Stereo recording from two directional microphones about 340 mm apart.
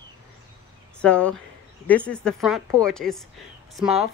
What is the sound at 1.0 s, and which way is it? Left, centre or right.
Speech, centre.